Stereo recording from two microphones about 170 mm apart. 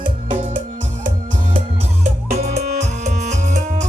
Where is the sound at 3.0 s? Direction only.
45° right (ahead or behind).